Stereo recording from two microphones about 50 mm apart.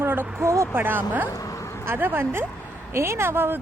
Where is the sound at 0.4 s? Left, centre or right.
Right.